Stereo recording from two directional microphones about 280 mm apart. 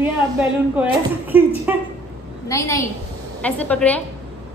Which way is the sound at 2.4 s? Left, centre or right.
Centre.